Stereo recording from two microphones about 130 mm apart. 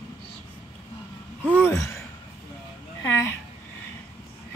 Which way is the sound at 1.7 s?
25° left (ahead or behind).